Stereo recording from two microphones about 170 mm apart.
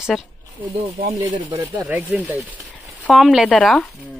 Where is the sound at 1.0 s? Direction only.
50° right (ahead or behind).